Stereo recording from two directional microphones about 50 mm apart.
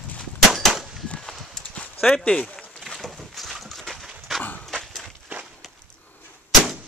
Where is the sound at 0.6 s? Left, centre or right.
Centre.